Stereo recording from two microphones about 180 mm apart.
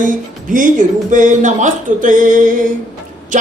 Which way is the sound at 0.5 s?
45° right (ahead or behind).